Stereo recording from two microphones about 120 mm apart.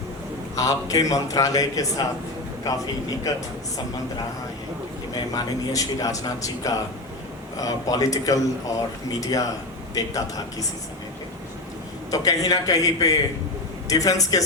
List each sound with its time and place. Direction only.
0.5 s speech: 30° left (ahead or behind)
5.1 s speech: 30° left (ahead or behind)
12.1 s speech: 30° left (ahead or behind)